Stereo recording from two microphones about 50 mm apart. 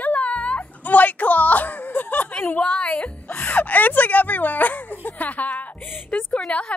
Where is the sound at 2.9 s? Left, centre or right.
Left.